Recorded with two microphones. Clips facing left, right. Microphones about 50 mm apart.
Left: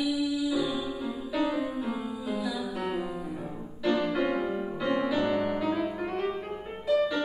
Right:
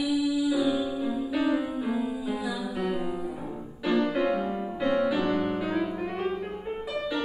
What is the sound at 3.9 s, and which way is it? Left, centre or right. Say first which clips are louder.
Music: right 2 dB; centre.